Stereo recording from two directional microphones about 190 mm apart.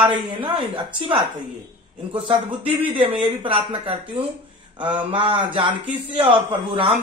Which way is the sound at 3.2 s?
25° right (ahead or behind).